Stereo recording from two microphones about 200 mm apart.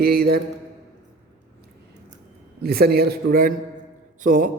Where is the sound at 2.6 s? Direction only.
50° right (ahead or behind).